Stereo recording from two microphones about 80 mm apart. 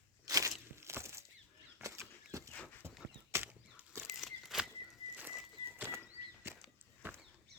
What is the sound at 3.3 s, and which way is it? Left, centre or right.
Horse, right.